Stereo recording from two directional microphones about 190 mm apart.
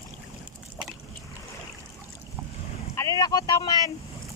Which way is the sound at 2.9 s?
20° left (ahead or behind).